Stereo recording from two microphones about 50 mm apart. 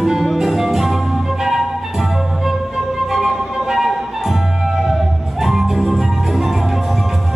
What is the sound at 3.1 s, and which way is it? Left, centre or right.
Flute, centre.